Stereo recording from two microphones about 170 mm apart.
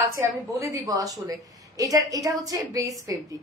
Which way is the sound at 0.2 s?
15° right (ahead or behind).